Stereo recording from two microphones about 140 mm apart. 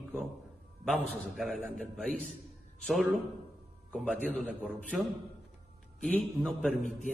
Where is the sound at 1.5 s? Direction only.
5° left (ahead or behind).